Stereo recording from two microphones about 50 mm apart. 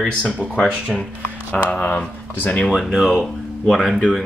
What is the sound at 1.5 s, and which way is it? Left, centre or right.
Speech, left.